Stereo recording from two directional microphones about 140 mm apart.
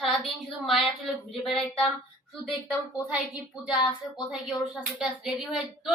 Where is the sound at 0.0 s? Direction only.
Centre (ahead or behind).